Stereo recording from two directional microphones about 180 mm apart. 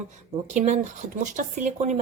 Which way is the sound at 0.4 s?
40° right (ahead or behind).